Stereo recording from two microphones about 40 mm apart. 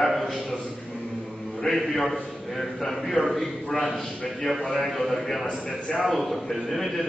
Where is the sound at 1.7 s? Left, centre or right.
Centre.